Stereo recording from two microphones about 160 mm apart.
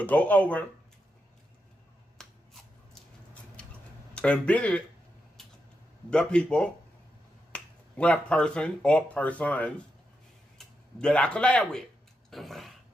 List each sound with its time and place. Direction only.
0.0 s speech: 10° left (ahead or behind)
2.1 s scissors: centre (ahead or behind)
4.1 s speech: 10° left (ahead or behind)
6.0 s speech: 5° left (ahead or behind)
12.3 s a sound: centre (ahead or behind)